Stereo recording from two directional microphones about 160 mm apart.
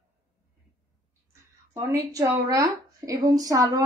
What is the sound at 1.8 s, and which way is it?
Speech, 15° right (ahead or behind).